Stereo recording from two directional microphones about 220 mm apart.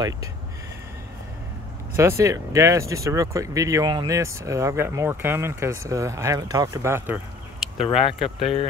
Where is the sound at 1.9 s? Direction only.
10° right (ahead or behind).